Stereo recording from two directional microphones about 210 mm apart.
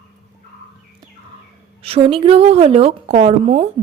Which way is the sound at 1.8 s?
25° right (ahead or behind).